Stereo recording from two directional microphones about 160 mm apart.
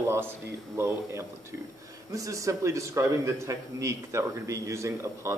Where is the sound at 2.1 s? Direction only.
20° right (ahead or behind).